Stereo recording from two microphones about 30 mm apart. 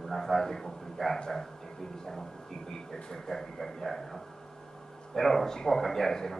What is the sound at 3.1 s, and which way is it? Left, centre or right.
Speech, centre.